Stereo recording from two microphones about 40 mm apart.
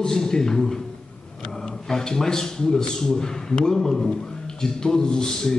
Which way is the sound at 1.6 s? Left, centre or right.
Centre.